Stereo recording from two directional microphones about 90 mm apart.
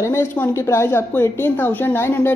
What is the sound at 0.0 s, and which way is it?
Speech, 30° left (ahead or behind).